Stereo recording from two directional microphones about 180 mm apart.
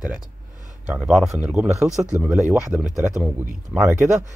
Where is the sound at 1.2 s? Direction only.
15° right (ahead or behind).